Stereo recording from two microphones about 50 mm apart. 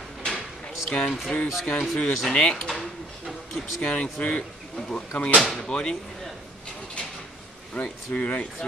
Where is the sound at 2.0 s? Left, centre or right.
Left.